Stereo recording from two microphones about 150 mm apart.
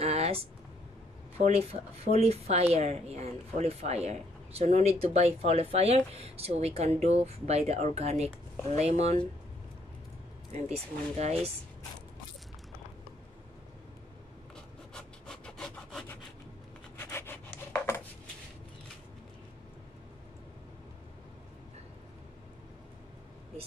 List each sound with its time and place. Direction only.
0.0 s a sound: 45° right (ahead or behind)
1.4 s speech: 45° right (ahead or behind)
10.5 s speech: 45° right (ahead or behind)
15.0 s wood: 5° left (ahead or behind)
17.0 s rub: 15° left (ahead or behind)